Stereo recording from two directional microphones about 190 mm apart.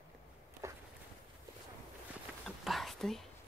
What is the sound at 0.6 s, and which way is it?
Walk, 15° right (ahead or behind).